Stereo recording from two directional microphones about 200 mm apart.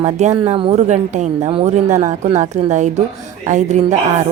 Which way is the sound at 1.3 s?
25° right (ahead or behind).